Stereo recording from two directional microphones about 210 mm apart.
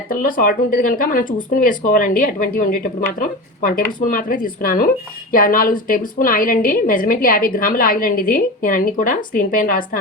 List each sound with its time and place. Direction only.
0.1 s a woman's voice: 40° left (ahead or behind)